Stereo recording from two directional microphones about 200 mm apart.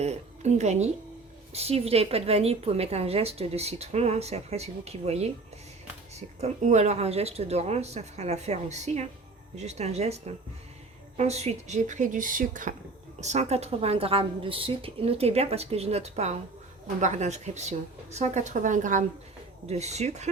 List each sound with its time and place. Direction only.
0.0 s a woman's voice: 35° right (ahead or behind)